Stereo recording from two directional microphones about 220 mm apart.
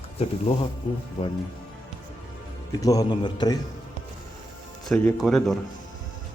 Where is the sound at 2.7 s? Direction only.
15° left (ahead or behind).